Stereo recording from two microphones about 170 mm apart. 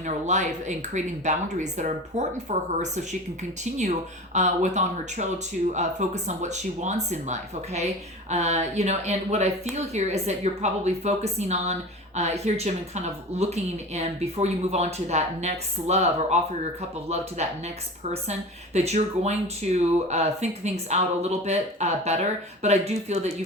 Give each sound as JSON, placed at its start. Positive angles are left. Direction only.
{"t": 0.0, "sound": "speech", "side_deg": -45}
{"t": 17.4, "sound": "speech", "side_deg": -40}